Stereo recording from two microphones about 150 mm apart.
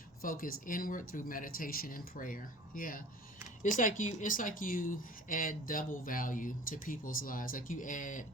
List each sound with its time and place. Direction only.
0.2 s speech: 75° left (ahead or behind)